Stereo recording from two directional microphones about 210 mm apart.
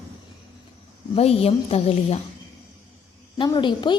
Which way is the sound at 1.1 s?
30° left (ahead or behind).